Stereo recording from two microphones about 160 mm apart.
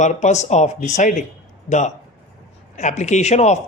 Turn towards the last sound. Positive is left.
turn(degrees=45)  # may be behind; listen again after turning